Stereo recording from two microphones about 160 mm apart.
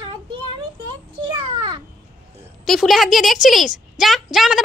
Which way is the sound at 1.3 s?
30° right (ahead or behind).